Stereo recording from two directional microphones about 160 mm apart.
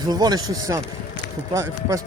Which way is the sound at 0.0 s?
25° right (ahead or behind).